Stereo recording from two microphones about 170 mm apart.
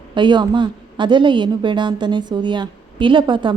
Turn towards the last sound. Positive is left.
turn(degrees=-30)  # may be behind; listen again after turning